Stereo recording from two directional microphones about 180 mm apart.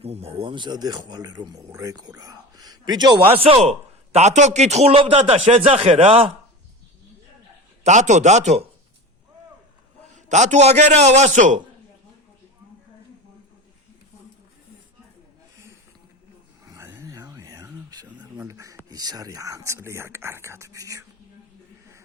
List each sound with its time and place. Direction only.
0.0 s a man's voice: 35° right (ahead or behind)
3.4 s a man's voice: 35° right (ahead or behind)
7.9 s a man's voice: 40° right (ahead or behind)
10.2 s a man's voice: 40° right (ahead or behind)
16.6 s a sound: 15° right (ahead or behind)
18.4 s speech: 15° right (ahead or behind)